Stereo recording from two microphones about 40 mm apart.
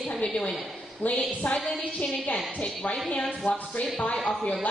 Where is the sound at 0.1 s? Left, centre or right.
Centre.